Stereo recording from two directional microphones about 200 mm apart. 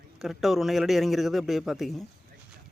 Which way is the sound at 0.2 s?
Centre (ahead or behind).